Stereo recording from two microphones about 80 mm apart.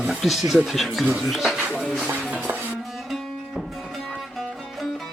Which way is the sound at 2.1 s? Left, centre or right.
Right.